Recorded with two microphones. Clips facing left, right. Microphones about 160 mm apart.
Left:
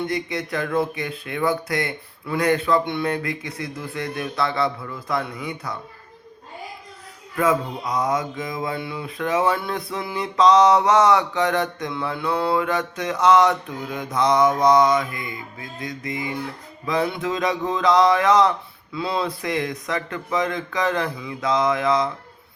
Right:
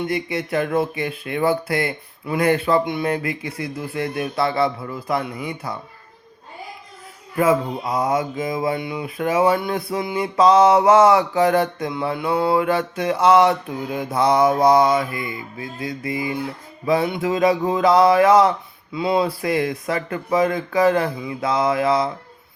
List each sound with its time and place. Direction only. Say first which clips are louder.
0.1 s mantra: right 3 dB; 25° right (ahead or behind)
7.3 s mantra: right 3 dB; 25° right (ahead or behind)